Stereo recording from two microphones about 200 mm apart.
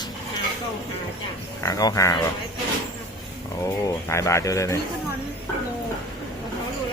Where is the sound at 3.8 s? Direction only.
15° left (ahead or behind).